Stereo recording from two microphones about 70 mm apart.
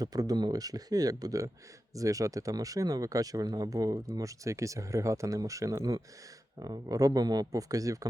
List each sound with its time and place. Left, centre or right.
0.0 s speech: right
6.6 s speech: right